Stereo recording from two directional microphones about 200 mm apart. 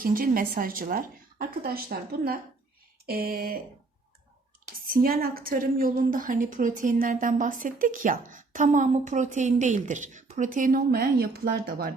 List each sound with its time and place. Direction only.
0.0 s a woman's voice: 45° right (ahead or behind)
4.6 s a woman's voice: 45° right (ahead or behind)